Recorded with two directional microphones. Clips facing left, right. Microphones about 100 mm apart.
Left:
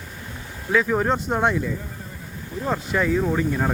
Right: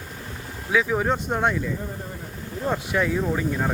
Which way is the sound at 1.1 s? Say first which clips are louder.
Left 2 dB; 10° left (ahead or behind).